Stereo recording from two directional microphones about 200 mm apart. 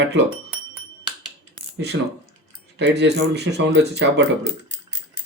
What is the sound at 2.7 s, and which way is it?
Speech, 60° right (ahead or behind).